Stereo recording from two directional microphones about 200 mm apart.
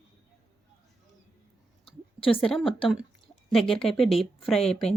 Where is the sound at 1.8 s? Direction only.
25° left (ahead or behind).